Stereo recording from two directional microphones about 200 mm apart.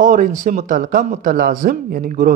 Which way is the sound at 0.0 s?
40° right (ahead or behind).